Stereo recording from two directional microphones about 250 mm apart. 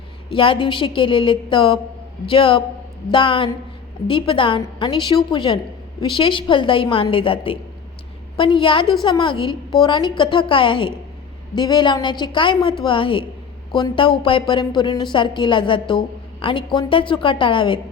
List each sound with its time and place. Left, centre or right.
0.3 s a woman's voice: left